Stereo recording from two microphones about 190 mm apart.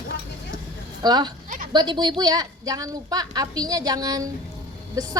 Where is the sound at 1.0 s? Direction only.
20° right (ahead or behind).